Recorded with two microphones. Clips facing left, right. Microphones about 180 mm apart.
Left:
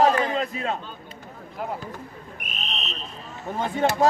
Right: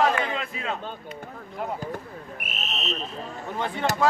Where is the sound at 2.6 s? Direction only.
Centre (ahead or behind).